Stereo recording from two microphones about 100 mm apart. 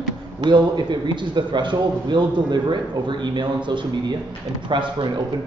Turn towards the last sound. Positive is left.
turn(degrees=-50)  # may be behind; listen again after turning